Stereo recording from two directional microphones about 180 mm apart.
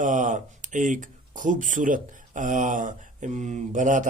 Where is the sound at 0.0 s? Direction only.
45° right (ahead or behind).